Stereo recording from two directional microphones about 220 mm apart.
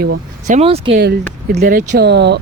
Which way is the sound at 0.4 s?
30° right (ahead or behind).